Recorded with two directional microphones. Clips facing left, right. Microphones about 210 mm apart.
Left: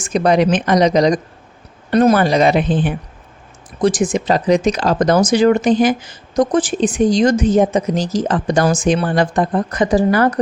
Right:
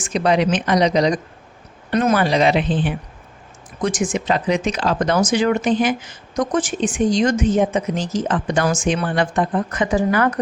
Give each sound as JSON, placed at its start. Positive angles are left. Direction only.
{"t": 0.1, "sound": "speech", "side_deg": 45}
{"t": 3.8, "sound": "speech", "side_deg": 35}